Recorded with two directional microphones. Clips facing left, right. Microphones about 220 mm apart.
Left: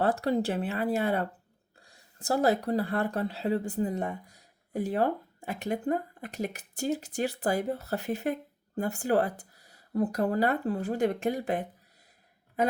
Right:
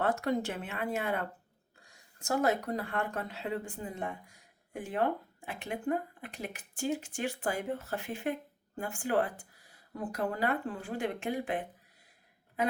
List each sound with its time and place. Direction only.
0.0 s speech: 35° left (ahead or behind)